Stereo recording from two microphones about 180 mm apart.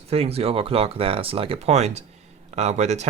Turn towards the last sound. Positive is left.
turn(degrees=-40)  # may be behind; listen again after turning